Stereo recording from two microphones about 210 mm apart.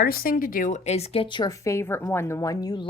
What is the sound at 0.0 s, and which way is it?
Speech, 45° left (ahead or behind).